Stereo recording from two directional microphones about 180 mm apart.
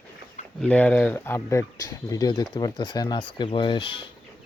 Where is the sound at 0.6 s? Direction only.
5° left (ahead or behind); by 4.1 s 30° left (ahead or behind).